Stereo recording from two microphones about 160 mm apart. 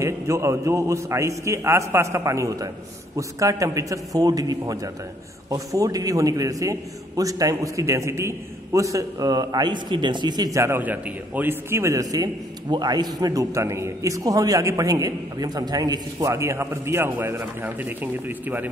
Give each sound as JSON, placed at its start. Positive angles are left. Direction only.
{"t": 0.0, "sound": "a man's voice", "side_deg": -20}